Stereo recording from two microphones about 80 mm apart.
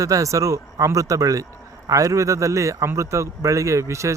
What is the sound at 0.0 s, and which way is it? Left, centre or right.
A man's voice, right.